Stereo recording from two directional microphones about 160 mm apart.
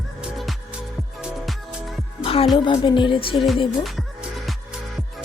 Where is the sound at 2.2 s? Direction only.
35° left (ahead or behind).